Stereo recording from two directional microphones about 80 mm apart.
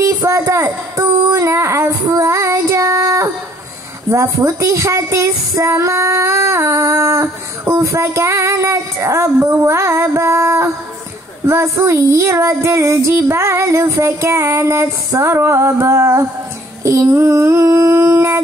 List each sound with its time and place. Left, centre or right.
0.0 s a sound: right
1.9 s child singing: right
4.1 s speech: right
18.1 s howl: right